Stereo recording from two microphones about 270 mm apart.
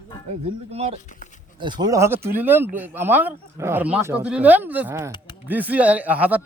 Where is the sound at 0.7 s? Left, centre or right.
Right.